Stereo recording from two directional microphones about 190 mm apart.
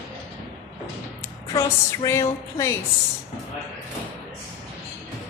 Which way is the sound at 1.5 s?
15° left (ahead or behind).